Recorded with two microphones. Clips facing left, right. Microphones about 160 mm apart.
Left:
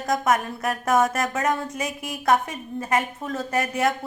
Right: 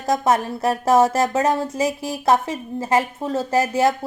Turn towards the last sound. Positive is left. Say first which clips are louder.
# right 5 dB
turn(degrees=-30)  # may be behind; listen again after turning